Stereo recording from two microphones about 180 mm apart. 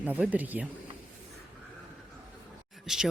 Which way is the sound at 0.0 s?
10° right (ahead or behind).